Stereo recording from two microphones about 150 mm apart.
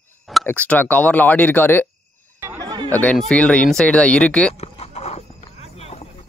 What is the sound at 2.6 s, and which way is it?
Chatter, 30° right (ahead or behind).